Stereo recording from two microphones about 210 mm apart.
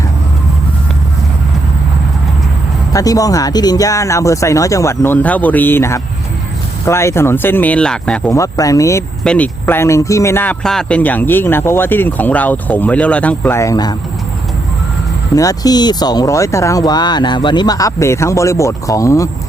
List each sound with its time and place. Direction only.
2.9 s speech: 15° left (ahead or behind)
15.4 s speech: 15° left (ahead or behind)